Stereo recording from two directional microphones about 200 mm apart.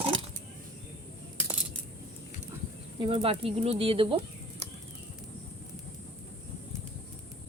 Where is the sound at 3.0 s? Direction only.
25° right (ahead or behind).